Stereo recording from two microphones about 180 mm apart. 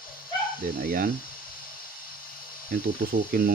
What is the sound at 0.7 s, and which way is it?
Speech, 60° right (ahead or behind).